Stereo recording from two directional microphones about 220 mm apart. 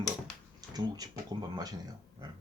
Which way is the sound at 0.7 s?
15° right (ahead or behind).